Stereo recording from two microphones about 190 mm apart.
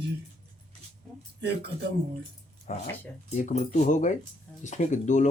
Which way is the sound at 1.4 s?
65° right (ahead or behind).